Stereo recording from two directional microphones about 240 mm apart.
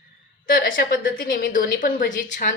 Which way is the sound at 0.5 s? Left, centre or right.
Left.